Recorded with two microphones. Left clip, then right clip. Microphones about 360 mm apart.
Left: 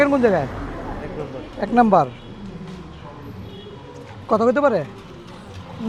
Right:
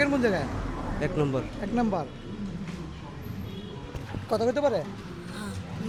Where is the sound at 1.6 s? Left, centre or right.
Left.